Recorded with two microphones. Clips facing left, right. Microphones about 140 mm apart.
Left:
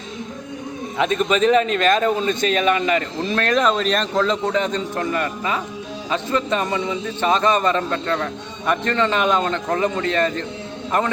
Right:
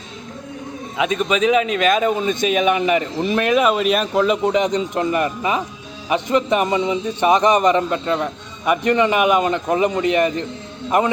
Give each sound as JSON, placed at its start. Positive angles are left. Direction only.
{"t": 0.9, "sound": "a man's voice", "side_deg": -5}